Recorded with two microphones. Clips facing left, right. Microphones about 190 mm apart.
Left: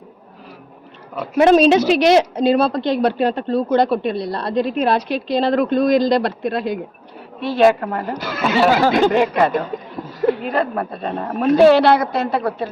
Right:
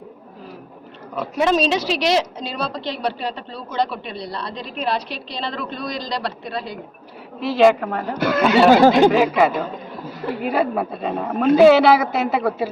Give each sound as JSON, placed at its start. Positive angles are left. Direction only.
{"t": 1.4, "sound": "a woman's voice", "side_deg": 55}
{"t": 7.4, "sound": "a woman's voice", "side_deg": 0}